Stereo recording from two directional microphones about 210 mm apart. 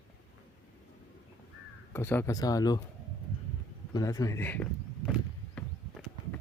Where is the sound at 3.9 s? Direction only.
15° left (ahead or behind).